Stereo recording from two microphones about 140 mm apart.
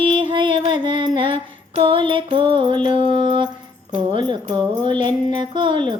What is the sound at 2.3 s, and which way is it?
Mantra, 35° right (ahead or behind).